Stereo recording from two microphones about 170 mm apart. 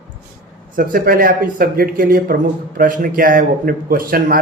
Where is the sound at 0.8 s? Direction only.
55° right (ahead or behind).